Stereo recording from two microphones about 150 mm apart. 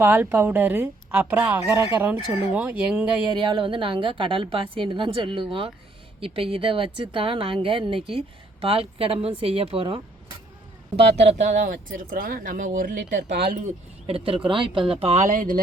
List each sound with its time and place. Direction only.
0.0 s a woman's voice: 15° right (ahead or behind)
3.4 s a woman's voice: 35° right (ahead or behind); by 13.3 s 55° right (ahead or behind)
13.3 s speech: 90° right
14.1 s a woman's voice: 35° right (ahead or behind); by 15.6 s 65° right (ahead or behind)